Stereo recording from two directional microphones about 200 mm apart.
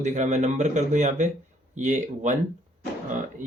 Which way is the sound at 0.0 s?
35° right (ahead or behind).